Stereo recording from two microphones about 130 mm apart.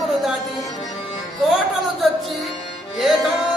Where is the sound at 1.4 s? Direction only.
Centre (ahead or behind).